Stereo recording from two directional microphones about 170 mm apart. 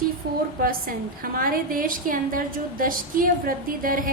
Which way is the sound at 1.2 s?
55° right (ahead or behind).